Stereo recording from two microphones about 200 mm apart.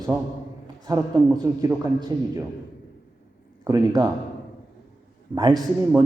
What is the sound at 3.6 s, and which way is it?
Speech, 20° right (ahead or behind).